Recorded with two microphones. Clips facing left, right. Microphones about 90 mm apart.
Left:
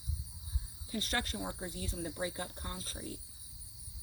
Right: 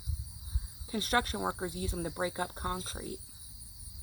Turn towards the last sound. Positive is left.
turn(degrees=-55)  # may be behind; listen again after turning